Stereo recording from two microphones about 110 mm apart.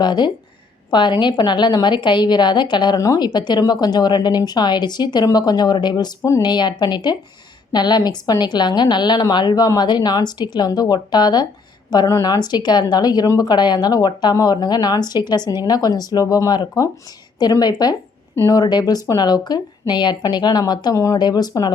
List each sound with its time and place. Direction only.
0.0 s a woman's voice: 40° left (ahead or behind)